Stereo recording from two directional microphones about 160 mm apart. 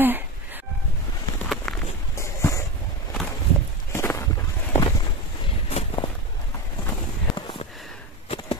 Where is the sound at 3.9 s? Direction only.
20° left (ahead or behind).